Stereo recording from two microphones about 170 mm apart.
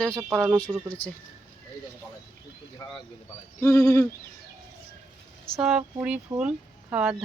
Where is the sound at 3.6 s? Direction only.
20° left (ahead or behind).